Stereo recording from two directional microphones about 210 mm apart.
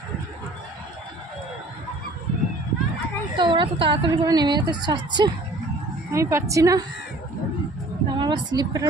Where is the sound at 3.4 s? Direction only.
25° right (ahead or behind).